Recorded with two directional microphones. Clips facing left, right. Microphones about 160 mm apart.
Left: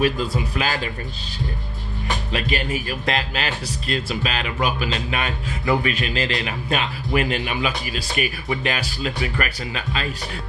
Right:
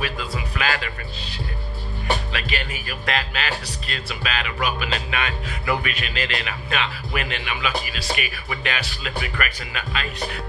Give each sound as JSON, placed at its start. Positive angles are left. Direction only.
{"t": 0.0, "sound": "a man's voice", "side_deg": 35}
{"t": 2.3, "sound": "a man's voice", "side_deg": 35}